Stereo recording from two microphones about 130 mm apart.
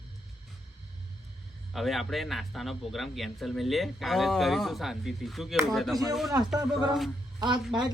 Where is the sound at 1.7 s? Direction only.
Centre (ahead or behind).